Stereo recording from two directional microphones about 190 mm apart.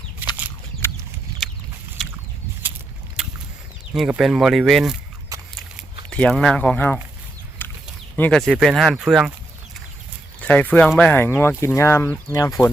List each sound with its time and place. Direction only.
0.8 s chicken: 10° left (ahead or behind)
3.9 s speech: centre (ahead or behind)
5.3 s a sound: 15° right (ahead or behind)
6.1 s speech: 5° left (ahead or behind)
7.6 s a sound: 10° left (ahead or behind)
8.1 s speech: 5° left (ahead or behind)
10.4 s speech: 5° left (ahead or behind)